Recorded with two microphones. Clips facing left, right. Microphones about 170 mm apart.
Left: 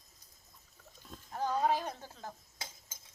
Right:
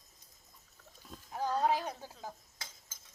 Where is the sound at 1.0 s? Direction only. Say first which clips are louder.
Even; 5° right (ahead or behind).